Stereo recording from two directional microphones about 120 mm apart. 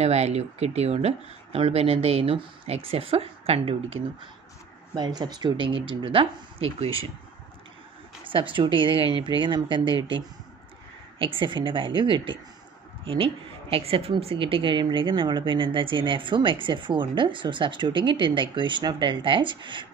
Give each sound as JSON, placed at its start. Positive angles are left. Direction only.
{"t": 0.0, "sound": "speech", "side_deg": -65}
{"t": 4.9, "sound": "speech", "side_deg": -35}
{"t": 8.2, "sound": "a woman's voice", "side_deg": -45}